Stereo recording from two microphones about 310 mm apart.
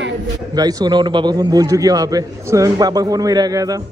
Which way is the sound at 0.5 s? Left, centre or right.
Centre.